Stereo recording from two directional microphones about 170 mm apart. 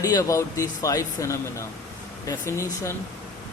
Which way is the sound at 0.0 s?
20° left (ahead or behind).